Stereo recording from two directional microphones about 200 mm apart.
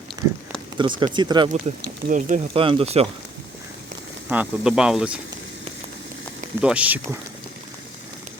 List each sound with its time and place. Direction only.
0.8 s speech: 25° right (ahead or behind)
2.0 s speech: 40° right (ahead or behind)
2.6 s speech: 25° right (ahead or behind)
4.3 s speech: 5° right (ahead or behind)
6.6 s speech: 5° right (ahead or behind)